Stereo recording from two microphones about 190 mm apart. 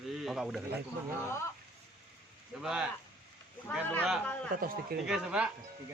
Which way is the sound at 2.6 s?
5° right (ahead or behind).